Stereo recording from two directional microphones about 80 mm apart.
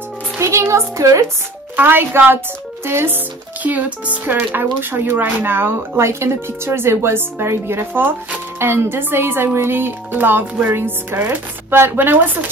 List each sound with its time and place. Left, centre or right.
0.4 s speech: right
1.8 s speech: right
3.6 s speech: centre